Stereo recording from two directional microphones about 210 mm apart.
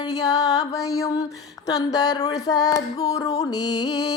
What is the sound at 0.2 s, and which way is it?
Music, 15° left (ahead or behind).